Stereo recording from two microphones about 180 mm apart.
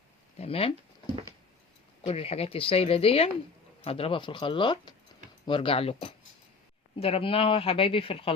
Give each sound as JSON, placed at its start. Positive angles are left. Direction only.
{"t": 0.3, "sound": "speech", "side_deg": 35}
{"t": 2.0, "sound": "speech", "side_deg": 35}